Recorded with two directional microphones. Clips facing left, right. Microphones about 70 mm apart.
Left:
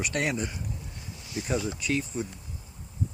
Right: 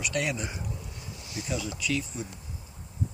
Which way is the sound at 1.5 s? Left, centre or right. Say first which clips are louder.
Left 2 dB; left.